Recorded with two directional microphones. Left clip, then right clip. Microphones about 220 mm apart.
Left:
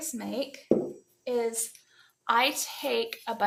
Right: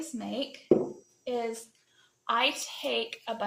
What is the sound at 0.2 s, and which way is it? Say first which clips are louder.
A woman's voice: left 2 dB; 40° left (ahead or behind).